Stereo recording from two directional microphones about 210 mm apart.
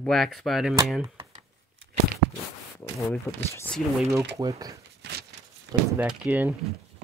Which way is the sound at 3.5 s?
10° left (ahead or behind).